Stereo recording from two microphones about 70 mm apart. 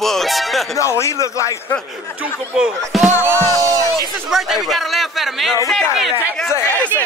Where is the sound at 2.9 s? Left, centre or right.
Centre.